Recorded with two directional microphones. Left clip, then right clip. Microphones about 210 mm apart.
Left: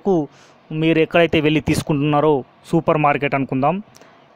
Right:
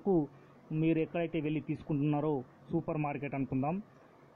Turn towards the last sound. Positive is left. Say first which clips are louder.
# left 17 dB
turn(degrees=55)  # may be behind; listen again after turning